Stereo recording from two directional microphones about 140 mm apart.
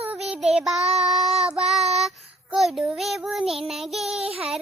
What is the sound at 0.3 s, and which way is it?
Child singing, 5° right (ahead or behind).